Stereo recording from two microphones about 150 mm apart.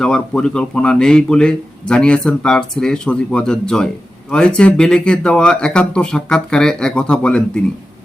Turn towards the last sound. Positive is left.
turn(degrees=5)  # may be behind; listen again after turning